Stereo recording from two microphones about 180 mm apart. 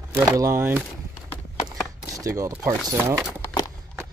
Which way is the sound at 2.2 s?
15° right (ahead or behind).